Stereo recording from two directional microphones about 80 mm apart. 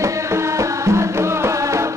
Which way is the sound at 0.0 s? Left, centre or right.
Right.